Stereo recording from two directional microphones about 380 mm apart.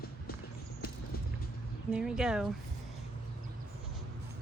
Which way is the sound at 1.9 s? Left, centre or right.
Centre.